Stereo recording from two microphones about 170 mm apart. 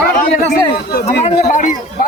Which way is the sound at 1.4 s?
45° left (ahead or behind).